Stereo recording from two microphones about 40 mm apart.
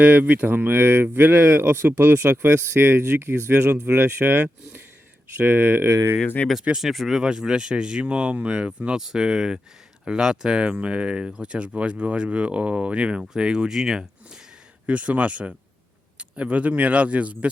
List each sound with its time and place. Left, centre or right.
0.0 s speech: right
0.5 s speech: right
5.4 s speech: right
6.2 s speech: left
6.7 s speech: centre
7.2 s speech: centre
9.0 s speech: centre; by 13.2 s right
13.2 s speech: centre
14.8 s speech: right
16.1 s a sound: right
16.5 s speech: right